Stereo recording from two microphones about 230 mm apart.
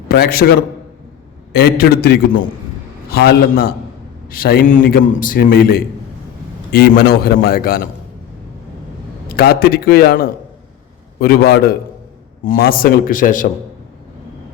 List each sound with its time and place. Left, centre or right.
0.1 s a man's voice: left
9.3 s a man's voice: left